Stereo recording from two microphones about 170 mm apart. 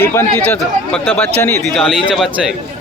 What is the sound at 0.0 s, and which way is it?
A man's voice, 15° left (ahead or behind).